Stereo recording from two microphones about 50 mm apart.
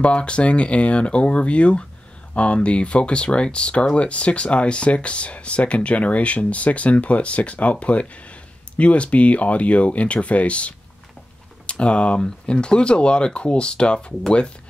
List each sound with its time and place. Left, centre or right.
0.0 s speech: left